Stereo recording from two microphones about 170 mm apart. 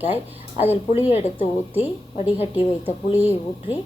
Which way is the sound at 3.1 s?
10° right (ahead or behind).